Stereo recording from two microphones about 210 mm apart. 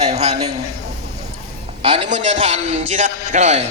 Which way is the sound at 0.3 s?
30° right (ahead or behind).